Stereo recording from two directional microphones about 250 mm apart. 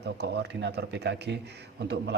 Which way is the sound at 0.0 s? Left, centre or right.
Right.